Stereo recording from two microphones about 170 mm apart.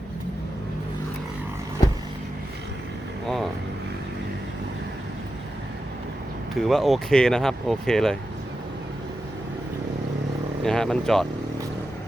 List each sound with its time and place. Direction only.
6.6 s speech: centre (ahead or behind)
10.6 s speech: 5° left (ahead or behind)